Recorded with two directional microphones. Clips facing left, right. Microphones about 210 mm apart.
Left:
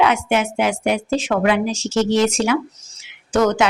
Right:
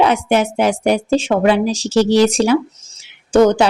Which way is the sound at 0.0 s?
35° right (ahead or behind).